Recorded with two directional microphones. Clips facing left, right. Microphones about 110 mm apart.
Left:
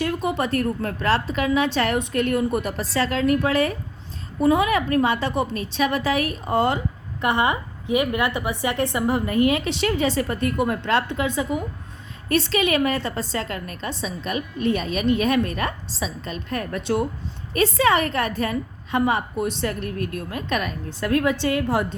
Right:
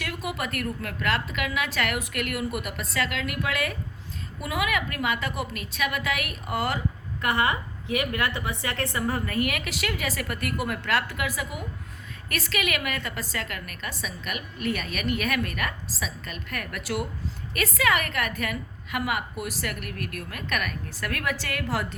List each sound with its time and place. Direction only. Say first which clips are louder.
0.0 s a woman's voice: left 8 dB; 30° left (ahead or behind)